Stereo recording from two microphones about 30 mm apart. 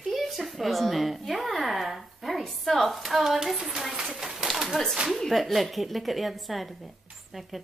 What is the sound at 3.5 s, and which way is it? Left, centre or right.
Speech, centre.